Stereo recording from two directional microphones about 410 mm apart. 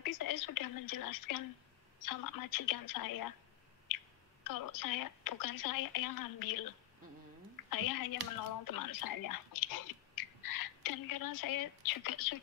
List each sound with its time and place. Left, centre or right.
0.0 s a woman's voice: left
4.5 s a woman's voice: left
7.7 s a woman's voice: left